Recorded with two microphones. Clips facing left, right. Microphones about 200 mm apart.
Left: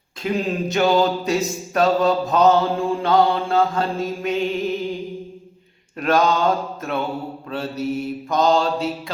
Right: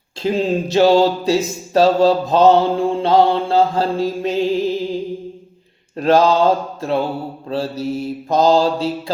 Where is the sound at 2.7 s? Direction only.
30° right (ahead or behind).